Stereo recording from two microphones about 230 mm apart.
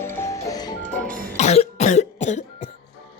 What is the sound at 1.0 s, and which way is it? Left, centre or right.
Cough, right.